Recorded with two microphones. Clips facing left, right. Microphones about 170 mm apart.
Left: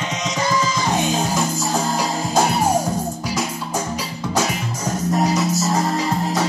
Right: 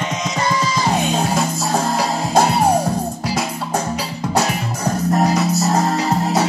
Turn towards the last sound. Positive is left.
turn(degrees=-60)  # may be behind; listen again after turning